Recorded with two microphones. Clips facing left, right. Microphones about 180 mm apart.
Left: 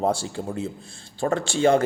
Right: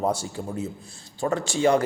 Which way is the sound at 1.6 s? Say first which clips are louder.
Left 2 dB; 50° left (ahead or behind).